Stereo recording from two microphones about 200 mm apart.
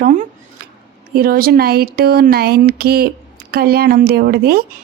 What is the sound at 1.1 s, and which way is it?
Speech, 50° right (ahead or behind).